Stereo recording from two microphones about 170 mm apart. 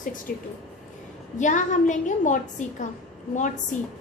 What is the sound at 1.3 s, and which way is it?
A woman's voice, 45° left (ahead or behind).